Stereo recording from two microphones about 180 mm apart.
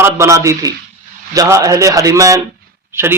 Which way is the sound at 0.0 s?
15° right (ahead or behind).